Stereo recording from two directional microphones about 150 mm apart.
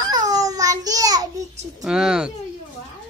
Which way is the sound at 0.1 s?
25° right (ahead or behind).